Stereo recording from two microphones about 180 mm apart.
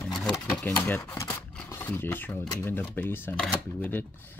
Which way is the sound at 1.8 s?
10° left (ahead or behind).